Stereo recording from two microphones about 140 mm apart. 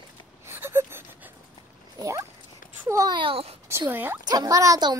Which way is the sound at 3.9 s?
15° right (ahead or behind).